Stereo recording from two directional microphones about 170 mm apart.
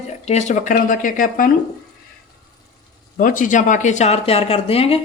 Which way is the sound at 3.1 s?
50° left (ahead or behind).